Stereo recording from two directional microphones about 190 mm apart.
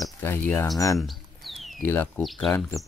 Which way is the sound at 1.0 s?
Centre (ahead or behind).